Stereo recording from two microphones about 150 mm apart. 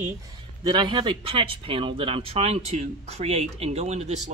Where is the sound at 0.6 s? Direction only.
30° right (ahead or behind).